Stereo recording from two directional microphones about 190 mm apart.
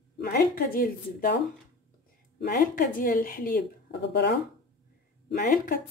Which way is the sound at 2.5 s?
45° left (ahead or behind).